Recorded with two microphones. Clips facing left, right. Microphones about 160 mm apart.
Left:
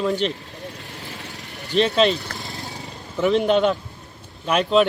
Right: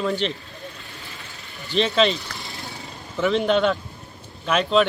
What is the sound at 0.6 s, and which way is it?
Vehicle, 70° left (ahead or behind).